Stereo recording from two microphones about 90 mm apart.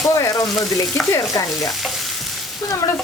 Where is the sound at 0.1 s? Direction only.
40° left (ahead or behind).